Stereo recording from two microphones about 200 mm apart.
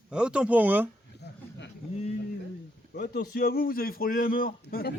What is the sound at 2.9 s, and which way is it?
Speech, 50° left (ahead or behind).